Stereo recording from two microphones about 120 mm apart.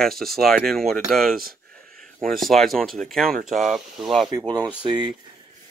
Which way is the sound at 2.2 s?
Centre (ahead or behind).